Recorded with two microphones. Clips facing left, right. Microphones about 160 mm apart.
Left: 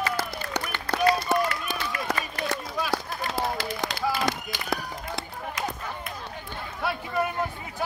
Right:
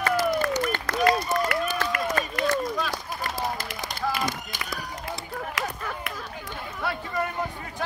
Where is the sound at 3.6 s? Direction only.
65° left (ahead or behind).